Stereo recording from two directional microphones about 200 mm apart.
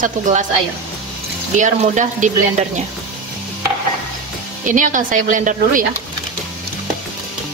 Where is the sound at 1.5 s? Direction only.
40° right (ahead or behind).